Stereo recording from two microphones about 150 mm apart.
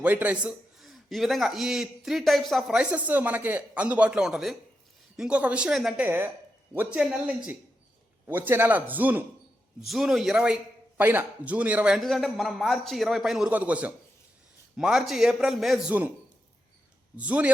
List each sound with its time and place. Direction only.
0.0 s a man's voice: 10° right (ahead or behind)
6.1 s a man's voice: 15° right (ahead or behind)
11.9 s a man's voice: centre (ahead or behind)
17.2 s a man's voice: 10° right (ahead or behind)